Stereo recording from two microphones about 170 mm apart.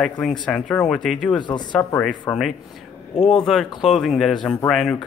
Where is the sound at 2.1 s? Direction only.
5° left (ahead or behind).